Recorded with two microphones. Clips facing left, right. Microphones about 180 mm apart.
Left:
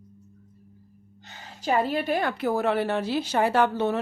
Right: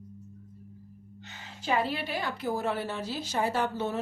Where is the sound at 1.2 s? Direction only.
40° left (ahead or behind).